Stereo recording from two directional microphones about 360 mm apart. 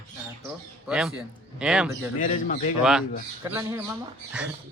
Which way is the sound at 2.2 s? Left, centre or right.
Left.